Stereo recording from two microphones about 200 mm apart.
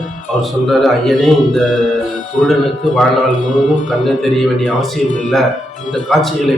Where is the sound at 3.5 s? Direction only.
40° left (ahead or behind).